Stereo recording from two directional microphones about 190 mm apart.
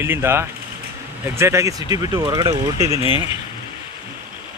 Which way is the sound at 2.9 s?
25° left (ahead or behind).